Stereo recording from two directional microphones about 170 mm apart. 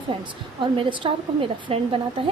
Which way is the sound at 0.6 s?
30° right (ahead or behind).